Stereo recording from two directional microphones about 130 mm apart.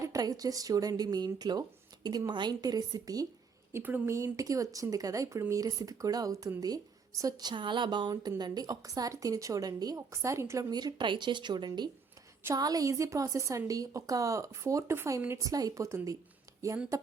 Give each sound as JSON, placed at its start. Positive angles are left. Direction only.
{"t": 0.0, "sound": "a woman's voice", "side_deg": -25}
{"t": 3.7, "sound": "a woman's voice", "side_deg": -15}